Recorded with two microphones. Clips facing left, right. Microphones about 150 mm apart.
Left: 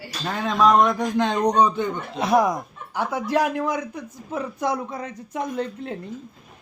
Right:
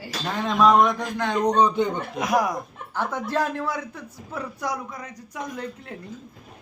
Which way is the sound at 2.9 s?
10° left (ahead or behind).